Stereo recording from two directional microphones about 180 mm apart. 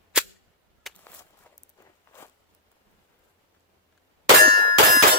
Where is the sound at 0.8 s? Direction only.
Centre (ahead or behind).